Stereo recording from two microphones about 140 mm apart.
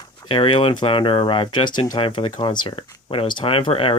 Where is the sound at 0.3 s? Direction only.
40° left (ahead or behind).